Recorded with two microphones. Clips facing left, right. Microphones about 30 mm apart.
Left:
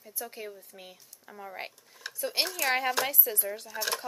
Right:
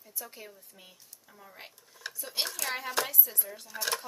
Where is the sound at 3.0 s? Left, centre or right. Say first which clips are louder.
Left 5 dB; left.